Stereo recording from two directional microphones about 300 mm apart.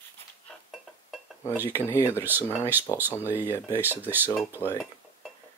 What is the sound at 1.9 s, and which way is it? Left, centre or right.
Speech, centre.